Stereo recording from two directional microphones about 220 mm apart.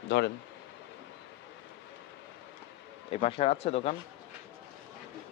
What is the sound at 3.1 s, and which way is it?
Speech, 25° left (ahead or behind).